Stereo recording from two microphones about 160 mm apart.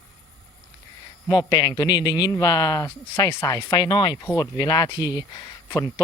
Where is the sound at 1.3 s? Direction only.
25° left (ahead or behind).